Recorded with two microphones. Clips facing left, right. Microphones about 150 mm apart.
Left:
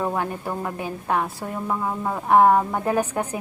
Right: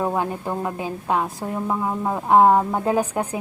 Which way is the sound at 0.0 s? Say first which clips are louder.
Right 2 dB; 15° right (ahead or behind).